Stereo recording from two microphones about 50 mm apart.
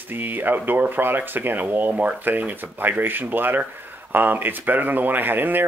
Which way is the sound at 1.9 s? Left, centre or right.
Right.